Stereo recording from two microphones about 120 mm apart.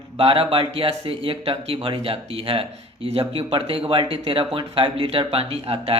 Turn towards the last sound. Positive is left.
turn(degrees=-55)  # may be behind; listen again after turning